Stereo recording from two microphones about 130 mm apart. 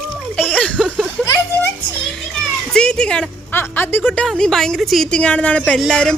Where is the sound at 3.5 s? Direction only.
15° left (ahead or behind).